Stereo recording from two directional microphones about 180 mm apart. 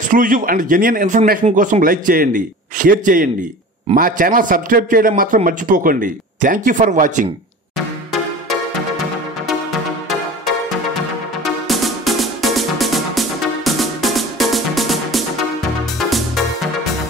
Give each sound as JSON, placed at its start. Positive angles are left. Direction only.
{"t": 0.1, "sound": "a man's voice", "side_deg": -50}
{"t": 7.7, "sound": "music", "side_deg": 0}
{"t": 11.4, "sound": "music", "side_deg": 0}